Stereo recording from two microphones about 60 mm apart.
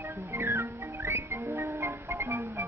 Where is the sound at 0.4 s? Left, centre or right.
Right.